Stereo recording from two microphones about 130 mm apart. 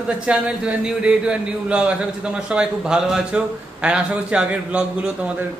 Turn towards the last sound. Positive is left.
turn(degrees=-10)  # may be behind; listen again after turning